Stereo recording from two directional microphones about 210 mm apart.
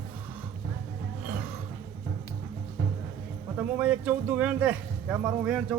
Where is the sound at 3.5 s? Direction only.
5° right (ahead or behind).